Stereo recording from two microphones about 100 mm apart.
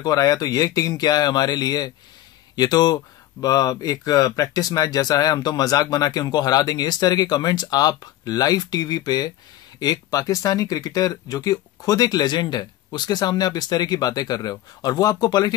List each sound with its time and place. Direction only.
0.0 s speech: 40° left (ahead or behind)